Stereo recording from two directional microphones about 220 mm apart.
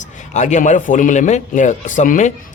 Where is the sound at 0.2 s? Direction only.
35° left (ahead or behind).